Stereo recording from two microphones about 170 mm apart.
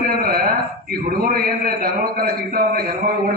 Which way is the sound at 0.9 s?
60° right (ahead or behind).